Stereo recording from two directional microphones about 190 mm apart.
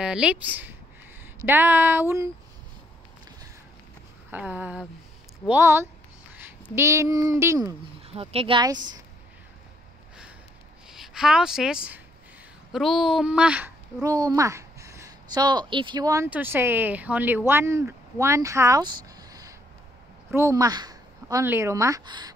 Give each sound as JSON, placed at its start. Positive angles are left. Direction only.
{"t": 0.0, "sound": "speech", "side_deg": -5}
{"t": 4.3, "sound": "speech", "side_deg": -10}
{"t": 8.1, "sound": "speech", "side_deg": -30}
{"t": 10.9, "sound": "a woman's voice", "side_deg": -5}